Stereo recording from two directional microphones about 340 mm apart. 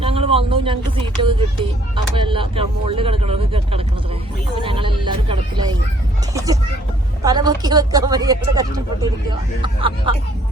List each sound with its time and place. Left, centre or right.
0.0 s speech: centre